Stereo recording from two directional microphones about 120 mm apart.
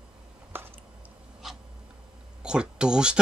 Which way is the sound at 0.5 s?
15° right (ahead or behind).